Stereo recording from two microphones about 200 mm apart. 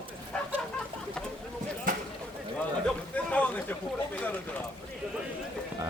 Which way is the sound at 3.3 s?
5° left (ahead or behind).